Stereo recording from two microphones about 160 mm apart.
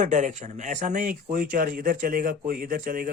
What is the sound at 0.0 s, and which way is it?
Speech, 50° right (ahead or behind).